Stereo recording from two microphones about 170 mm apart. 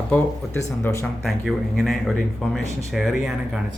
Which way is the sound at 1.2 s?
Centre (ahead or behind).